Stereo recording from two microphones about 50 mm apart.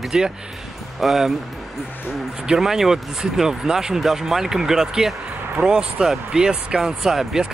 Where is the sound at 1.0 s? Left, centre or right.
Centre.